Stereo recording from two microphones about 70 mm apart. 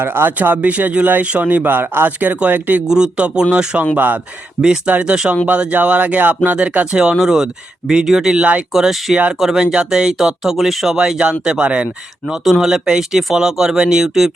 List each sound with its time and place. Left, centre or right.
0.0 s speech: right; by 3.8 s centre
3.9 s speech: right
5.1 s speech: centre
12.3 s speech: centre